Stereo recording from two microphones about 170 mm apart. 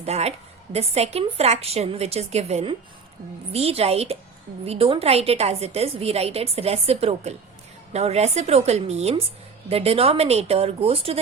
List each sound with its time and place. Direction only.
0.0 s a woman's voice: 40° right (ahead or behind)